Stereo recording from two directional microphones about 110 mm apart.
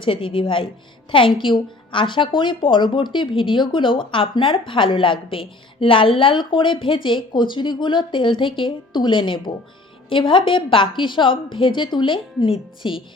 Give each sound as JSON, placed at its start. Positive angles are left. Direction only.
{"t": 0.0, "sound": "a woman's voice", "side_deg": 50}